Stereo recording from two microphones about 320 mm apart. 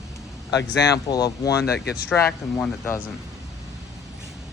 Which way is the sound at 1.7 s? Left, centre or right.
Left.